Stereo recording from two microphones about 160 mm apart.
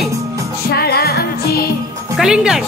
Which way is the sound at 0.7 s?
75° left (ahead or behind).